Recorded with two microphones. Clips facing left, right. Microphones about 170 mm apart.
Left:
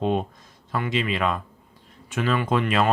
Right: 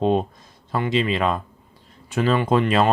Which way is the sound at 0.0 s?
35° right (ahead or behind).